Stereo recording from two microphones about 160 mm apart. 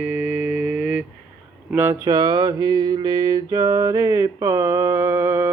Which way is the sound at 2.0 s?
25° right (ahead or behind).